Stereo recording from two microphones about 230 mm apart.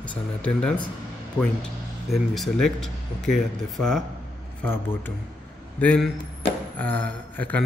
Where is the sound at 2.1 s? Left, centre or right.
Centre.